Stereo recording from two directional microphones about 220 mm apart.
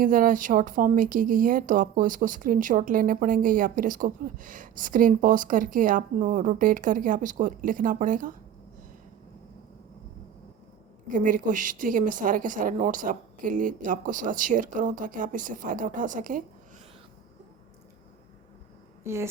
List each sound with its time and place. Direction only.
0.0 s speech: 40° right (ahead or behind)
11.1 s speech: 35° right (ahead or behind)
19.0 s a sound: 10° right (ahead or behind)